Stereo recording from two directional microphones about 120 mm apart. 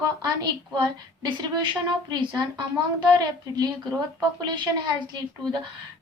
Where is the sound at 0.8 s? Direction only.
35° right (ahead or behind).